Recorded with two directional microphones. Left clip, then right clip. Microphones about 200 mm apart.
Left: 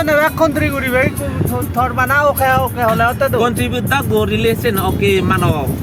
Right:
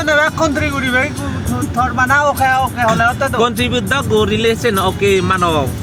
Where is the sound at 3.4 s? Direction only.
10° left (ahead or behind).